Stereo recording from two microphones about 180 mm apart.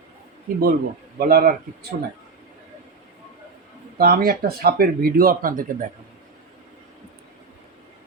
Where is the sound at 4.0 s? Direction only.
55° right (ahead or behind).